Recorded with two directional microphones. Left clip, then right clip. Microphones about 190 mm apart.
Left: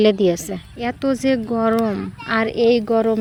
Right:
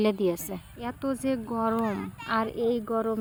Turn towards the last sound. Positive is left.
turn(degrees=10)  # may be behind; listen again after turning